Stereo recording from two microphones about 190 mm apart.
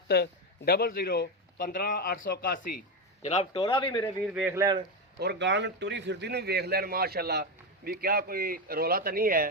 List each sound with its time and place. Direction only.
0.1 s a man's voice: 55° left (ahead or behind)
3.2 s speech: 35° left (ahead or behind)
4.3 s a man's voice: 5° right (ahead or behind)
4.5 s a man's voice: 20° right (ahead or behind)
5.2 s a man's voice: 65° right (ahead or behind)